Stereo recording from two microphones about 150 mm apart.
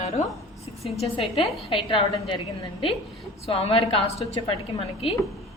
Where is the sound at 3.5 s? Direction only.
40° left (ahead or behind).